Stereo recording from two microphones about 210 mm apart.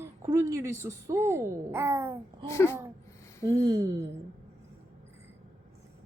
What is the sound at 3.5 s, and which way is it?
Speech, 15° right (ahead or behind).